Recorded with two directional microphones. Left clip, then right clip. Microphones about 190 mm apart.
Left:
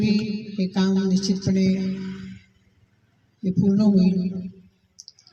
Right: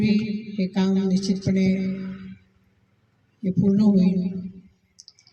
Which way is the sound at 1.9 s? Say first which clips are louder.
Left 1 dB; 60° left (ahead or behind).